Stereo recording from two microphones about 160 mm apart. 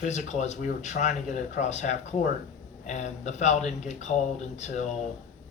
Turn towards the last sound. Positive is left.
turn(degrees=45)  # may be behind; listen again after turning